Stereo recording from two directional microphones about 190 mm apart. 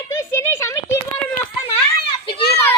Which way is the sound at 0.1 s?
15° left (ahead or behind).